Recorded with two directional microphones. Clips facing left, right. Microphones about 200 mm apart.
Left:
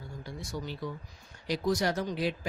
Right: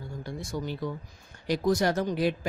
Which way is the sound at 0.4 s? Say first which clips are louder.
Right 4 dB; 50° right (ahead or behind).